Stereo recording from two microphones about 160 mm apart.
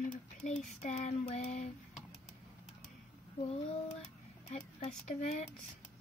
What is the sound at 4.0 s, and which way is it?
Speech, 45° left (ahead or behind).